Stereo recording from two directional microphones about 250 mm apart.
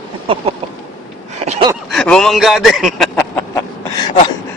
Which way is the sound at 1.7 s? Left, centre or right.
Centre.